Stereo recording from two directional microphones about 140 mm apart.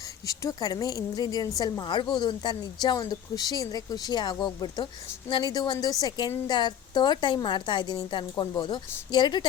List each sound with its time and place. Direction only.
0.3 s a woman's voice: 25° left (ahead or behind)